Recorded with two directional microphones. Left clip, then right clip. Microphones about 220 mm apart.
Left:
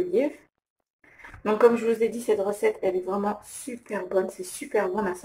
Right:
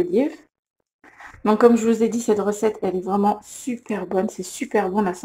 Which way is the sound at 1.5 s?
35° right (ahead or behind).